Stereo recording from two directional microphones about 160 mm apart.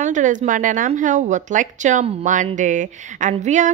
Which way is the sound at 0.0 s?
50° right (ahead or behind).